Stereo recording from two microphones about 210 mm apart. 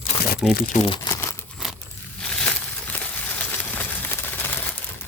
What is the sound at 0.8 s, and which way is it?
Crumpling, 20° left (ahead or behind).